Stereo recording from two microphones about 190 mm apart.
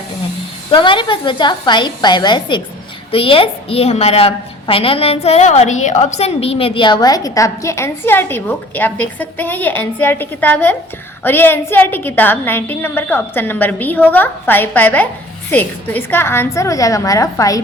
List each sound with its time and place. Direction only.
0.7 s a woman's voice: 25° left (ahead or behind)